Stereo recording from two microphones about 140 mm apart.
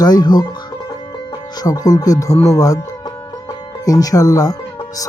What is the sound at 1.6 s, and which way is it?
Speech, 25° left (ahead or behind).